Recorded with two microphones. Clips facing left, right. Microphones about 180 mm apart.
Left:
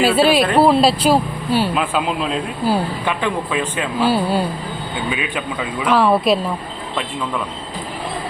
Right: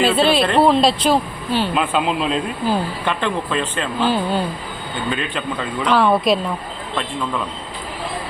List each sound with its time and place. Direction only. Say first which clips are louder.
0.0 s speech: left 2 dB; 10° left (ahead or behind)